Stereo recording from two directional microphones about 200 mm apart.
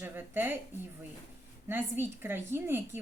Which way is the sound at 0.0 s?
10° right (ahead or behind).